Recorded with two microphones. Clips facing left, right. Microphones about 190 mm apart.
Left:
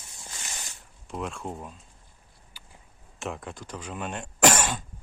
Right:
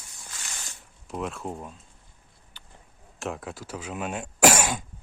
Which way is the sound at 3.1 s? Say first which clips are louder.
Right 2 dB; centre (ahead or behind).